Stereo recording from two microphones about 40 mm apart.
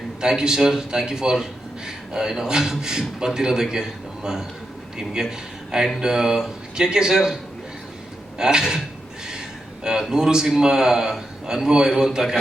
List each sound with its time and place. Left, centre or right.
0.2 s a man's voice: centre
8.4 s a man's voice: centre
9.2 s a sound: centre
10.0 s a man's voice: centre